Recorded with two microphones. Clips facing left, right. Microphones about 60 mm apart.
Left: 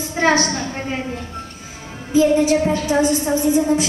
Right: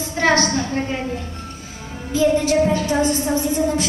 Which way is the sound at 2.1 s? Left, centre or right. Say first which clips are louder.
Left 3 dB; centre.